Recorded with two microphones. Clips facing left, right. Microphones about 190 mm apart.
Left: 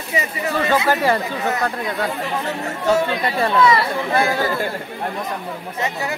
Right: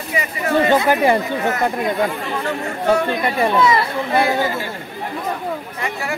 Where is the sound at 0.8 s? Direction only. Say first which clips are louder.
Right 3 dB; 15° right (ahead or behind).